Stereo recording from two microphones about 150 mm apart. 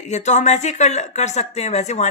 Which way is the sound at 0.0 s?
50° left (ahead or behind).